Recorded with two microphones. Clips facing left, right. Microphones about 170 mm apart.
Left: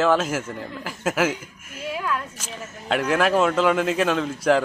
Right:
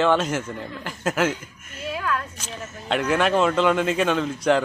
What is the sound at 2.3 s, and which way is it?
Speech, 5° left (ahead or behind).